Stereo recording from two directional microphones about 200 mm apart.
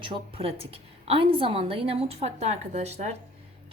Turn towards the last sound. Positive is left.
turn(degrees=-35)  # may be behind; listen again after turning